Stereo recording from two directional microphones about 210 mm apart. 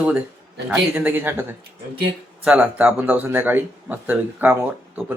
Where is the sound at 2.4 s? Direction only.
5° right (ahead or behind).